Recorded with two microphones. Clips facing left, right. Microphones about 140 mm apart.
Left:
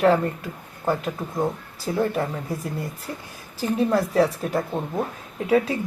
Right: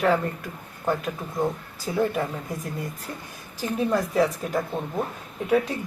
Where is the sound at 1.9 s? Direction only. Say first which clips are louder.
Left 1 dB; 5° right (ahead or behind).